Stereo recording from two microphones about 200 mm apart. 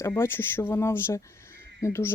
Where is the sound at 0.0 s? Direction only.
10° left (ahead or behind).